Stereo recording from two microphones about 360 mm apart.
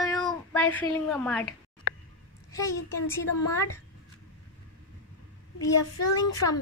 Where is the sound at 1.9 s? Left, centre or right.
Left.